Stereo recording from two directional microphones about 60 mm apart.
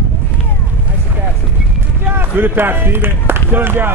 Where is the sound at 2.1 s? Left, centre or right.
Right.